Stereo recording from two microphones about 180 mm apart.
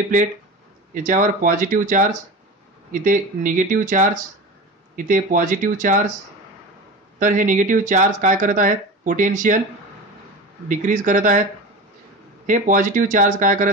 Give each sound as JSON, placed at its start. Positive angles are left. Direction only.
{"t": 1.0, "sound": "speech", "side_deg": -45}
{"t": 7.2, "sound": "speech", "side_deg": -45}
{"t": 10.7, "sound": "speech", "side_deg": -45}
{"t": 12.4, "sound": "speech", "side_deg": -45}